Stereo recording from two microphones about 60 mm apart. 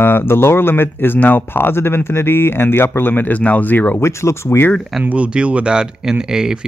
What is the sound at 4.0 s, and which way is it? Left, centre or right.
Speech, left.